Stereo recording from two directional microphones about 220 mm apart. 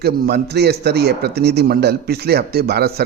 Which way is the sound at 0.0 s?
45° right (ahead or behind).